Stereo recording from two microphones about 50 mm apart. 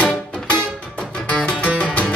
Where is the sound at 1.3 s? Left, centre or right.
Left.